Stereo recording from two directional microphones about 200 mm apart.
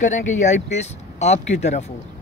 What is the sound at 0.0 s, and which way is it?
Speech, 40° left (ahead or behind).